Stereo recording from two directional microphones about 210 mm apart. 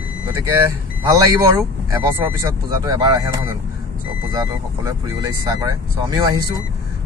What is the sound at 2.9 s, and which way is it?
Speech, 20° right (ahead or behind).